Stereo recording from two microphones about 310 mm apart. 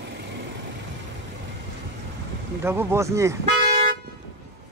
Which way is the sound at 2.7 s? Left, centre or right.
Centre.